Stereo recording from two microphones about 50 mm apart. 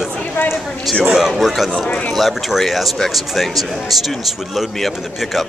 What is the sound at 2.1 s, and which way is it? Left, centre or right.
Speech, centre.